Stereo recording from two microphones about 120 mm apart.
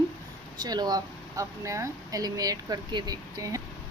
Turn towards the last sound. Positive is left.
turn(degrees=-30)  # may be behind; listen again after turning